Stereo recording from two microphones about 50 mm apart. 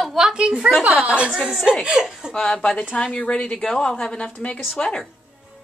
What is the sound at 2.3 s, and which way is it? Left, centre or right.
A woman's voice, centre.